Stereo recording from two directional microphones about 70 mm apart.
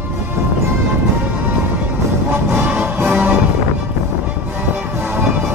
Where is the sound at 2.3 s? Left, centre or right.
Right.